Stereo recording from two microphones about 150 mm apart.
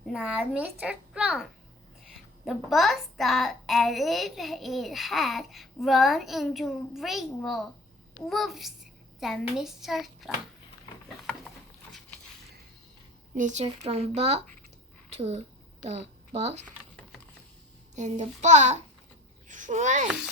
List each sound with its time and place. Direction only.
0.1 s a child's voice: 5° right (ahead or behind)
13.3 s a child's voice: 55° right (ahead or behind)
17.9 s a child's voice: 50° right (ahead or behind)
20.1 s a child's voice: 5° right (ahead or behind)